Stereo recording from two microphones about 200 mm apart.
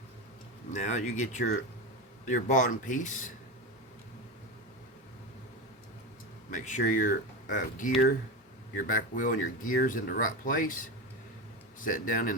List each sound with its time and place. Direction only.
0.7 s speech: 35° left (ahead or behind)
6.5 s speech: 40° left (ahead or behind)